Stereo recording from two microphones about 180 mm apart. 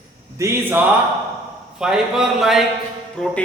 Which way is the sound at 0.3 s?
15° right (ahead or behind).